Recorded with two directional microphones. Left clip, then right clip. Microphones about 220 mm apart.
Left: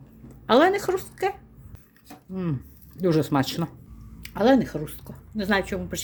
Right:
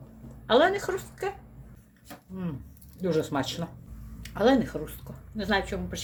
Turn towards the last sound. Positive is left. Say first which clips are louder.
# left 3 dB
turn(degrees=45)  # may be behind; listen again after turning